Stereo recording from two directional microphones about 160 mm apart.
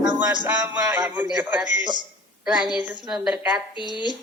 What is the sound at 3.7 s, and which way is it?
Speech, 30° left (ahead or behind).